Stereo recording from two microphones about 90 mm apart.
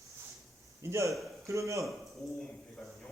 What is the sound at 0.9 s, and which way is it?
Speech, 35° right (ahead or behind).